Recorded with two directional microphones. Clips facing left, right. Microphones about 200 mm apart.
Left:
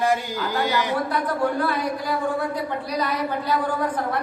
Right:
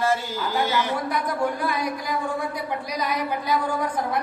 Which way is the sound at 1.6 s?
15° right (ahead or behind).